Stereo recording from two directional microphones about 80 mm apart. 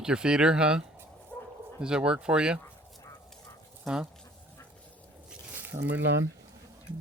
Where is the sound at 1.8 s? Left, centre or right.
Centre.